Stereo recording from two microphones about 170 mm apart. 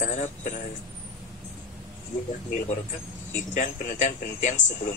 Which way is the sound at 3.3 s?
45° left (ahead or behind).